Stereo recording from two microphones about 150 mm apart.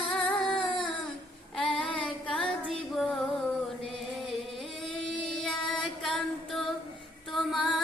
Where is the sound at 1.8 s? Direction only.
5° left (ahead or behind).